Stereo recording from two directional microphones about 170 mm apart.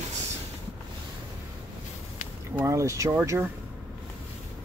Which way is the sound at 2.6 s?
15° right (ahead or behind).